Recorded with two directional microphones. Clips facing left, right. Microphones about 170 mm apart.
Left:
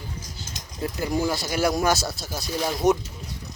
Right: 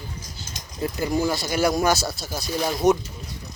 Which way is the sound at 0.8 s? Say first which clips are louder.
Right 2 dB; 5° right (ahead or behind).